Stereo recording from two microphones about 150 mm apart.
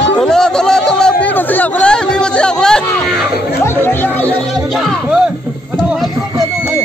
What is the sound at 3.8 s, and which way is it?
Music, 15° left (ahead or behind).